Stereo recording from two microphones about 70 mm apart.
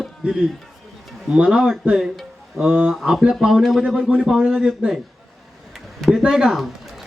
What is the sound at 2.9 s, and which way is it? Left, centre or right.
A man's voice, centre.